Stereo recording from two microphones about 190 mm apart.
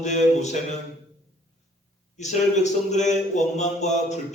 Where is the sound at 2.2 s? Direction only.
40° left (ahead or behind).